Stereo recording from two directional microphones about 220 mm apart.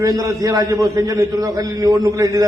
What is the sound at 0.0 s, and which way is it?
A man's voice, 15° right (ahead or behind).